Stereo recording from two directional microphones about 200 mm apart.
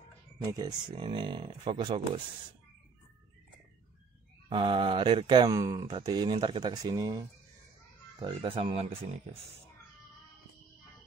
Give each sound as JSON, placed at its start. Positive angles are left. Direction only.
{"t": 0.4, "sound": "speech", "side_deg": -15}
{"t": 4.5, "sound": "speech", "side_deg": -25}